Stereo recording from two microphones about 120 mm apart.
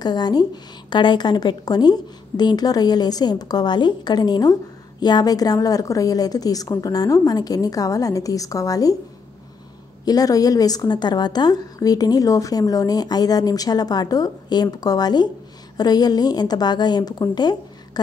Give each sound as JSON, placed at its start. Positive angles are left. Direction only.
{"t": 0.0, "sound": "a woman's voice", "side_deg": 35}
{"t": 10.0, "sound": "a woman's voice", "side_deg": 30}